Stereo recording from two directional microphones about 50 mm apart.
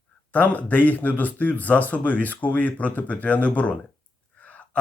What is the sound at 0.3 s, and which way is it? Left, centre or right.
Speech, left.